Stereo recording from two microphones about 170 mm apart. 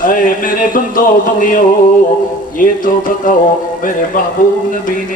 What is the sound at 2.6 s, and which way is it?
Speech, 50° left (ahead or behind).